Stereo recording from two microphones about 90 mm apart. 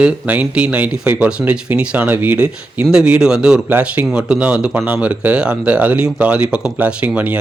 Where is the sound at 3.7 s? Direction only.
20° right (ahead or behind).